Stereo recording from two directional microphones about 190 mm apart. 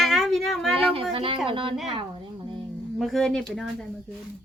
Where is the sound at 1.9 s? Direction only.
25° right (ahead or behind).